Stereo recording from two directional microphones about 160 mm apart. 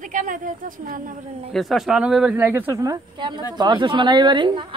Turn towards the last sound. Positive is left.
turn(degrees=-30)  # may be behind; listen again after turning